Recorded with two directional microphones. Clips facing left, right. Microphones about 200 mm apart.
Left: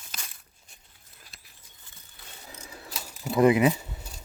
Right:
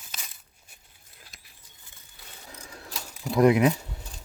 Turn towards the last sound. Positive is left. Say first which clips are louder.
# even
turn(degrees=5)  # may be behind; listen again after turning